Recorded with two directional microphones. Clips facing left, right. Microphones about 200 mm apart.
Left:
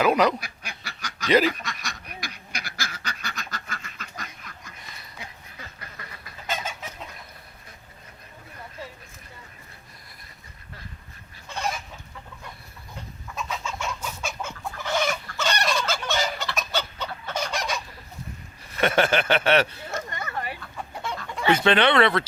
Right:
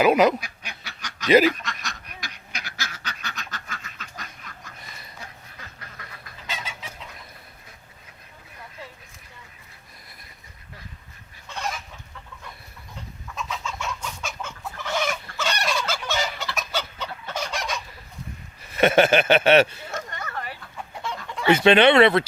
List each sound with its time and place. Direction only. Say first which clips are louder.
0.0 s speech: right 3 dB; 5° right (ahead or behind)
0.9 s quack: left 1 dB; 10° left (ahead or behind)
1.3 s speech: right 3 dB; 10° right (ahead or behind)
1.6 s duck: even; 10° left (ahead or behind)
6.5 s chicken: left 5 dB; 50° left (ahead or behind)
13.3 s chicken: even; 5° left (ahead or behind)
14.9 s fowl: left 1 dB; 5° right (ahead or behind)
18.8 s a sound: right 4 dB; 20° right (ahead or behind)
19.9 s a sound: left 1 dB; 10° left (ahead or behind)
21.5 s speech: right 4 dB; 20° right (ahead or behind)